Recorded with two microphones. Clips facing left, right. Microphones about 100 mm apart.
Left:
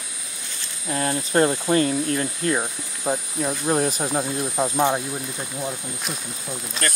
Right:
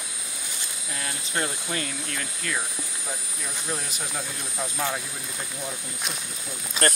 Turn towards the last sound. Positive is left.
turn(degrees=-40)  # may be behind; listen again after turning